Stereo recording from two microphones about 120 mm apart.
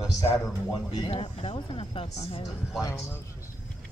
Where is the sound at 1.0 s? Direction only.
55° left (ahead or behind).